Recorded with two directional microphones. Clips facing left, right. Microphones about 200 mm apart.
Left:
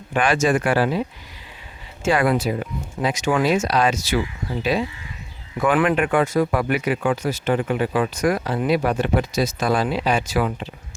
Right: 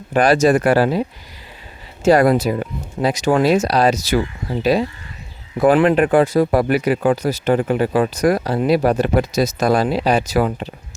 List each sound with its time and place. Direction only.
0.1 s speech: 40° right (ahead or behind)
2.0 s speech: 40° right (ahead or behind)